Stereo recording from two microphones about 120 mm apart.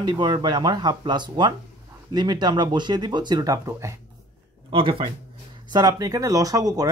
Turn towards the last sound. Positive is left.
turn(degrees=-30)  # may be behind; listen again after turning